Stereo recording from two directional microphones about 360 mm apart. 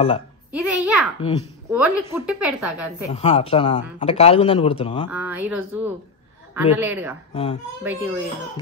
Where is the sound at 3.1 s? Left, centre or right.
Centre.